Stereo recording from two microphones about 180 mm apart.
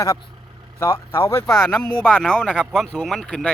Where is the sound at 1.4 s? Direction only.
Centre (ahead or behind).